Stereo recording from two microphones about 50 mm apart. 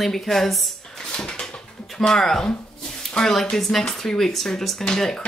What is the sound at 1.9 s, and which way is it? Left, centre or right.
Speech, centre.